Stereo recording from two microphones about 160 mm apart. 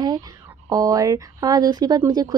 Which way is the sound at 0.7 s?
20° right (ahead or behind).